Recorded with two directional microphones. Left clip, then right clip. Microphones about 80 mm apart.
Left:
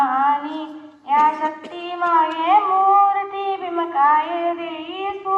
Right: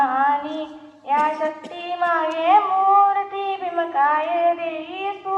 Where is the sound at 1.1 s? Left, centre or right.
Right.